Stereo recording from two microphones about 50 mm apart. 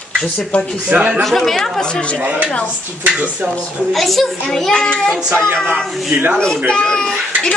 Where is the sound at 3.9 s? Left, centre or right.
Centre.